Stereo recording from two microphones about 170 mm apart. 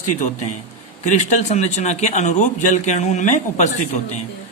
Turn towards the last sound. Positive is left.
turn(degrees=45)  # may be behind; listen again after turning